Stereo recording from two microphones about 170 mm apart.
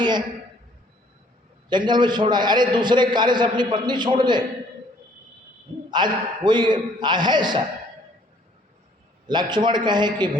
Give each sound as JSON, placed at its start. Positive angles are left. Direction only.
{"t": 1.7, "sound": "a man's voice", "side_deg": -25}
{"t": 5.9, "sound": "a man's voice", "side_deg": -25}
{"t": 9.2, "sound": "a man's voice", "side_deg": -25}